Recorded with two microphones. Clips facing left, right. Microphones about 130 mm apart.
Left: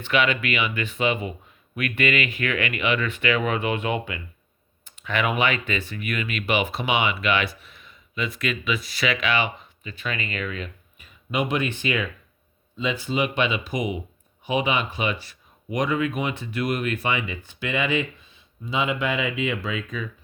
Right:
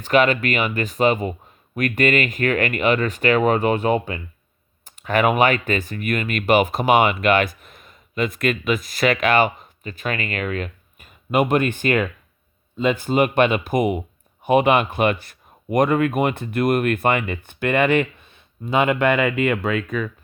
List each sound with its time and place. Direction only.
0.0 s speech: 40° right (ahead or behind); by 20.1 s 60° right (ahead or behind)